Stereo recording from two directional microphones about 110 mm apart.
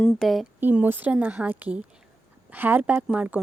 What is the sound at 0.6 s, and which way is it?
A woman's voice, 15° right (ahead or behind).